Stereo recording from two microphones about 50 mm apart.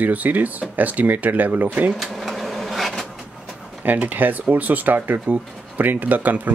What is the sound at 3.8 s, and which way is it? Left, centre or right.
Speech, right.